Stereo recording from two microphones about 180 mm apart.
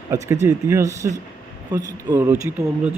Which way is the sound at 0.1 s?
15° right (ahead or behind).